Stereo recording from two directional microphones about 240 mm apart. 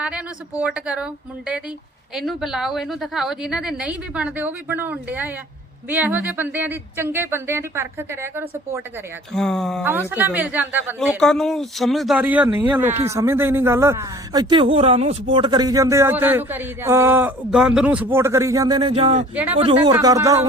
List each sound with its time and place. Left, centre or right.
0.0 s a woman's voice: centre
9.3 s a woman's voice: centre
11.2 s a woman's voice: centre